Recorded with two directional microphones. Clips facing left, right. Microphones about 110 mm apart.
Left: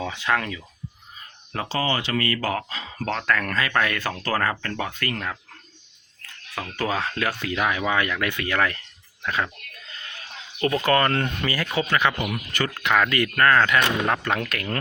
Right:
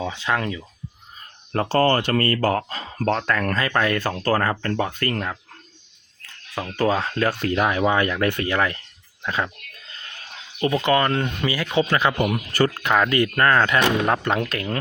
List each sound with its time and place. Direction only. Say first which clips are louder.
0.0 s speech: right 1 dB; 20° right (ahead or behind)
1.5 s speech: right 7 dB; 50° right (ahead or behind)
3.2 s speech: right 2 dB; 30° right (ahead or behind)
6.7 s speech: right 5 dB; 25° right (ahead or behind)
10.6 s speech: right 1 dB; 15° right (ahead or behind)
11.8 s speech: right 4 dB; 30° right (ahead or behind)
12.9 s speech: right 2 dB; 25° right (ahead or behind)